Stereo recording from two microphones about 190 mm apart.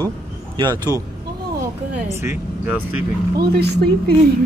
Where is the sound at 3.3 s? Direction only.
55° right (ahead or behind).